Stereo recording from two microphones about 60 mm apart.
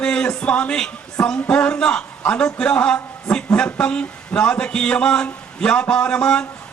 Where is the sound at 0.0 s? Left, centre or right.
Centre.